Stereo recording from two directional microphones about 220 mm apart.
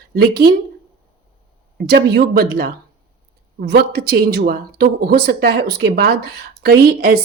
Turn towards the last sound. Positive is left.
turn(degrees=-45)  # may be behind; listen again after turning